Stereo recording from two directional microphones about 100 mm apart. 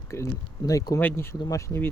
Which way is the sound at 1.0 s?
20° left (ahead or behind).